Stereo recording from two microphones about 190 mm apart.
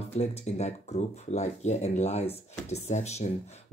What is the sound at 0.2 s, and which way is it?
Speech, 35° left (ahead or behind).